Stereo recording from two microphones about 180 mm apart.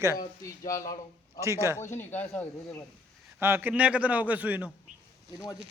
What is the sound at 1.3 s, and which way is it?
Speech, 15° right (ahead or behind).